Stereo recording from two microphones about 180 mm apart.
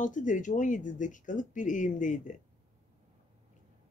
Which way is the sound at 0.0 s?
45° left (ahead or behind).